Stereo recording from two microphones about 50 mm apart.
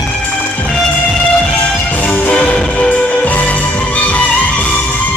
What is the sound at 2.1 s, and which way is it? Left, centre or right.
Music, left.